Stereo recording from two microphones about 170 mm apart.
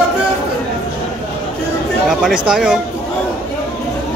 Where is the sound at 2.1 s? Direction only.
5° right (ahead or behind).